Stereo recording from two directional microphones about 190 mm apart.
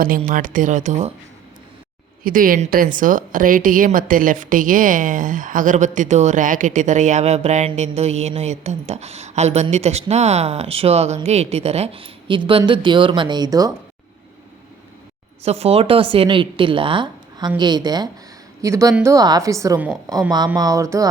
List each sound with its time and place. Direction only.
0.3 s speech: 45° right (ahead or behind)
2.2 s speech: 45° right (ahead or behind); by 13.7 s 20° right (ahead or behind)
15.4 s a woman's voice: 30° right (ahead or behind); by 21.1 s 15° right (ahead or behind)